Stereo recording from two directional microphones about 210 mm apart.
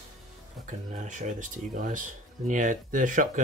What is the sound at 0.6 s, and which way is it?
Speech, 35° right (ahead or behind).